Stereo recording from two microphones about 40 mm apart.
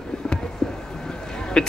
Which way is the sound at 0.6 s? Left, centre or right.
Left.